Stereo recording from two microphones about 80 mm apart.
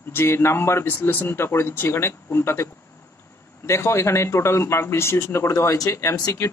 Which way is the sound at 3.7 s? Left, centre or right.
Left.